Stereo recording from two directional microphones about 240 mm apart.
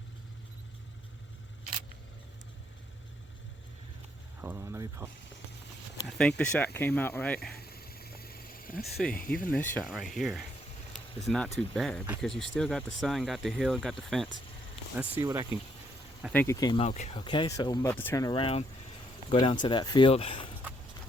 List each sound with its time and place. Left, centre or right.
4.4 s a sound: centre
6.1 s speech: centre
7.5 s a sound: left
8.8 s speech: centre
15.2 s speech: centre
16.3 s speech: centre